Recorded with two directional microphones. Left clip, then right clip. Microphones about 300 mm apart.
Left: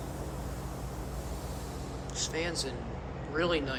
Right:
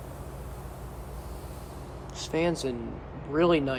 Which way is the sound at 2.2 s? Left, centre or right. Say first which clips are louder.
Right 6 dB; centre.